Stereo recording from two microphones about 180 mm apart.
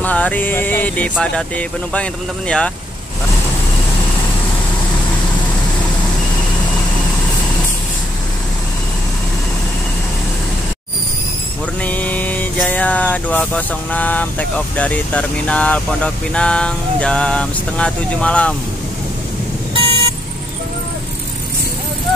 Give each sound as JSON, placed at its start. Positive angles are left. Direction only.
{"t": 0.0, "sound": "a sound", "side_deg": 10}
{"t": 1.1, "sound": "speech", "side_deg": 5}
{"t": 11.8, "sound": "vehicle", "side_deg": 10}
{"t": 19.7, "sound": "vehicle", "side_deg": -30}